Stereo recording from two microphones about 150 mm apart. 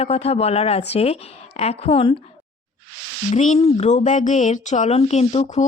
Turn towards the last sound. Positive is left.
turn(degrees=50)  # may be behind; listen again after turning